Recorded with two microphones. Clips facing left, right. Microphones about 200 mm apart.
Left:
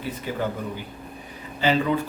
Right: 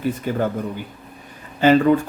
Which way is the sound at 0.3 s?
50° right (ahead or behind).